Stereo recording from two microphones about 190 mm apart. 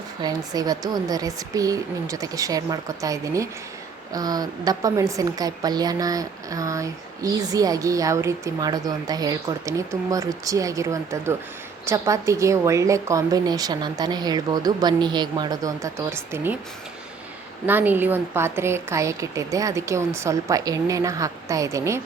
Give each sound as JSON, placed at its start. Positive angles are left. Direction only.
{"t": 0.2, "sound": "a woman's voice", "side_deg": -20}
{"t": 17.7, "sound": "a woman's voice", "side_deg": -10}